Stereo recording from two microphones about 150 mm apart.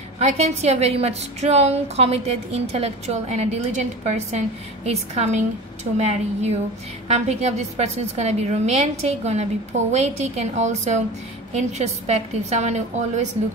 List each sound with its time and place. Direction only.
0.2 s a woman's voice: 45° right (ahead or behind)